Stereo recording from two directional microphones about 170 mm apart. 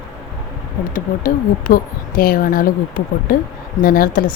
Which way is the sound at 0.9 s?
55° left (ahead or behind).